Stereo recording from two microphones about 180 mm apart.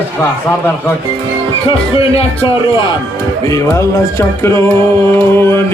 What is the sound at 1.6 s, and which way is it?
Speech, 30° left (ahead or behind).